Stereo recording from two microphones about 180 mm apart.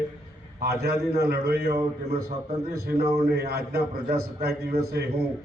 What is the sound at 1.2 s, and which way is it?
A man's voice, 60° right (ahead or behind).